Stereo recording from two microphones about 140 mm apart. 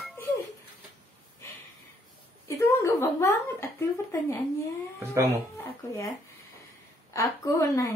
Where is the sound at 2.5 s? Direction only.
20° left (ahead or behind).